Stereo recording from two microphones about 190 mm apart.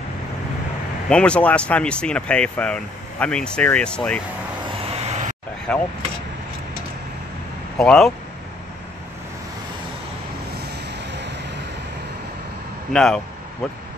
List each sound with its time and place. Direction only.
1.0 s speech: 5° left (ahead or behind)
4.8 s vehicle: 35° right (ahead or behind)
5.7 s speech: 5° left (ahead or behind)
7.7 s speech: 5° left (ahead or behind)
11.1 s vehicle: 65° right (ahead or behind)
12.9 s speech: 5° left (ahead or behind)